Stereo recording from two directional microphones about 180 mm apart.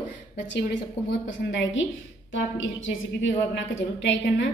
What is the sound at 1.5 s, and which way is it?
A woman's voice, 90° left.